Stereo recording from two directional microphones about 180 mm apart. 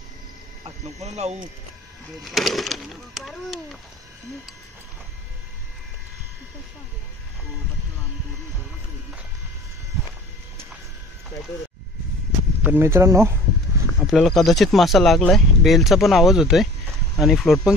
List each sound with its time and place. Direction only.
0.7 s speech: 35° right (ahead or behind)
2.2 s speech: centre (ahead or behind)
12.6 s speech: 10° right (ahead or behind)
13.9 s speech: centre (ahead or behind)